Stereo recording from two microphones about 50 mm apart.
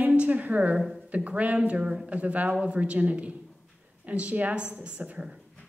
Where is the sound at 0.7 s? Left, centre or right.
Centre.